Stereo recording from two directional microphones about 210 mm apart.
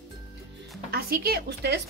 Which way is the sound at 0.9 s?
45° right (ahead or behind).